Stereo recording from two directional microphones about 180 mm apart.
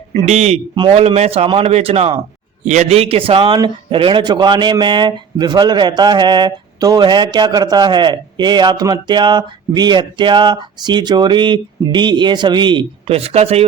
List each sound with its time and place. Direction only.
0.1 s a man's voice: 35° right (ahead or behind)